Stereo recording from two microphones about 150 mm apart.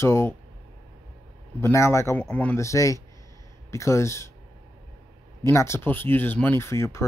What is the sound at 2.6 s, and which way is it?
Speech, 20° left (ahead or behind).